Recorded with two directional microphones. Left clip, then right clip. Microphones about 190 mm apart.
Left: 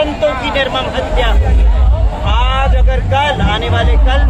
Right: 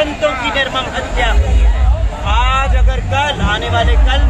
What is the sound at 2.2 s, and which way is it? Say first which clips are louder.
Vehicle: right 1 dB; 30° left (ahead or behind).